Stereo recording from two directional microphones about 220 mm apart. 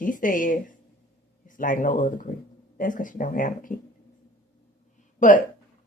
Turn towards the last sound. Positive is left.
turn(degrees=35)  # may be behind; listen again after turning